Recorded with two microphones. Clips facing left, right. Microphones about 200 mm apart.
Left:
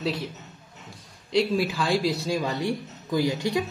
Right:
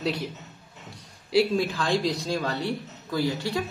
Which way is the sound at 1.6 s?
5° left (ahead or behind).